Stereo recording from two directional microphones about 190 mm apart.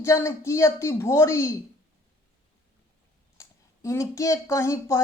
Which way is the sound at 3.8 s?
15° left (ahead or behind).